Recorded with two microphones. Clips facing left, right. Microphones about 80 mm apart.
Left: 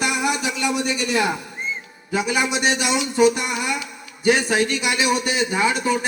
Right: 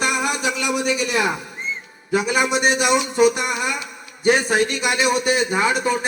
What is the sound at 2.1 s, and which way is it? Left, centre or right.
Speech, right.